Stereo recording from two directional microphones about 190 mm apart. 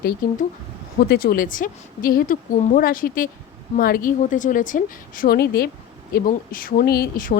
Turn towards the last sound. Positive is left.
turn(degrees=50)  # may be behind; listen again after turning